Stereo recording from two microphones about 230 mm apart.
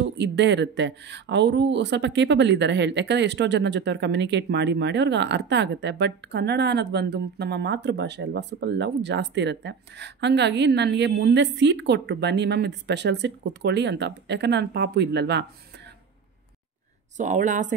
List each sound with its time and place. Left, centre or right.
0.0 s speech: right
17.2 s speech: right